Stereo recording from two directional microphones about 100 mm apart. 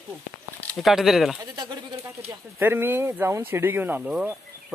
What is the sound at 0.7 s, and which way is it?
Speech, centre (ahead or behind).